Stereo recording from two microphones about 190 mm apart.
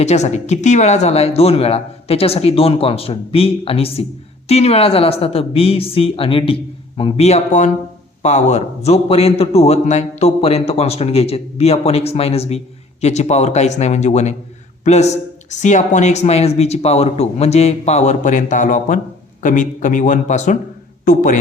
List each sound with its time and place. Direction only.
0.0 s a man's voice: 35° left (ahead or behind)